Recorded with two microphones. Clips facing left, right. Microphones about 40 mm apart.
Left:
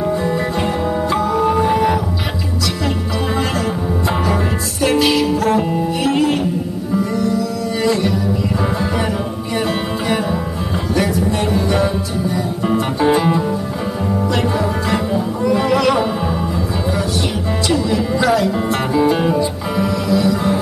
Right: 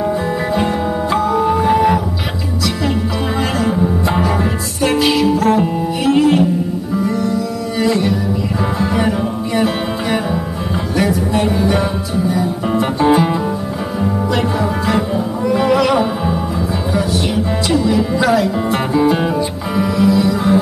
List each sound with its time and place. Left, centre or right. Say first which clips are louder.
0.0 s music: even; centre
3.5 s music: right 3 dB; centre
7.8 s music: right 2 dB; centre
9.6 s music: right 2 dB; centre
17.6 s speech: right 2 dB; centre
19.8 s music: right 3 dB; centre